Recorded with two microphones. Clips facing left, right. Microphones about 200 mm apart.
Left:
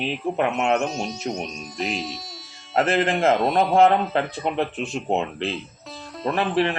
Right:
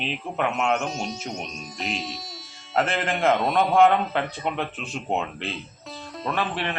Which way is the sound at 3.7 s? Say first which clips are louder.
Left 1 dB; 30° left (ahead or behind).